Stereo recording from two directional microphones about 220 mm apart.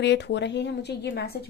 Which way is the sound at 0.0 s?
50° left (ahead or behind).